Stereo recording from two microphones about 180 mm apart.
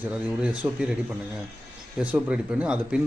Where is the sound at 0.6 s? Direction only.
10° right (ahead or behind).